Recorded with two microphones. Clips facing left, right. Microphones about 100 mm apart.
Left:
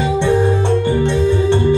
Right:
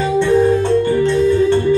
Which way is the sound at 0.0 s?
20° left (ahead or behind).